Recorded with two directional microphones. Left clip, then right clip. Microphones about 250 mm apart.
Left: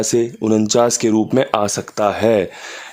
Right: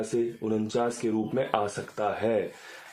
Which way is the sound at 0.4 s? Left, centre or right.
Left.